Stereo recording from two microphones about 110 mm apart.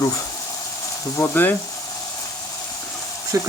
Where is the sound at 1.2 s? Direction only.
15° left (ahead or behind).